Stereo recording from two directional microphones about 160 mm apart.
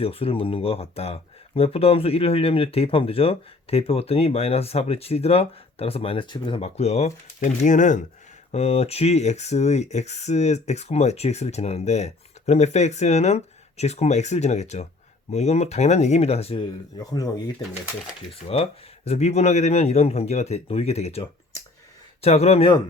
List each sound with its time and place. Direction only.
0.0 s speech: 35° left (ahead or behind)
6.6 s speech: 40° left (ahead or behind)
17.0 s speech: 25° left (ahead or behind)
18.4 s speech: 40° left (ahead or behind)